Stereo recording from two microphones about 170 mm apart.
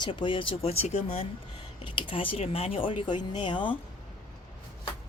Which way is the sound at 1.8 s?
30° left (ahead or behind).